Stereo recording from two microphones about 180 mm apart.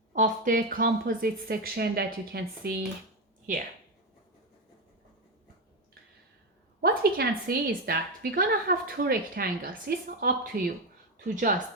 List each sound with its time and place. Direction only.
0.1 s a woman's voice: 50° right (ahead or behind)
6.8 s a woman's voice: 60° right (ahead or behind)